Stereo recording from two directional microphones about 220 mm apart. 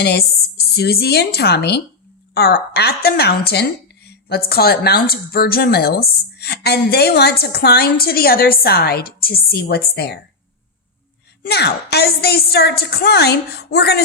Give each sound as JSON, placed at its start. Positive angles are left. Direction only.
{"t": 0.0, "sound": "a woman's voice", "side_deg": 45}
{"t": 11.4, "sound": "a woman's voice", "side_deg": 50}